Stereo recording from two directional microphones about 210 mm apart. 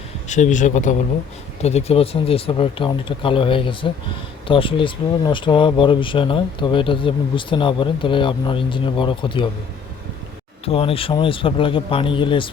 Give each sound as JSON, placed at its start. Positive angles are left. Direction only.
{"t": 0.3, "sound": "speech", "side_deg": 35}
{"t": 10.7, "sound": "speech", "side_deg": 25}